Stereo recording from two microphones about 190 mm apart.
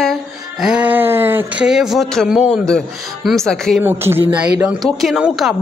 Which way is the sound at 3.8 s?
10° right (ahead or behind).